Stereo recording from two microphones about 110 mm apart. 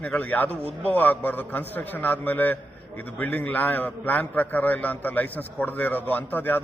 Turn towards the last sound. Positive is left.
turn(degrees=15)  # may be behind; listen again after turning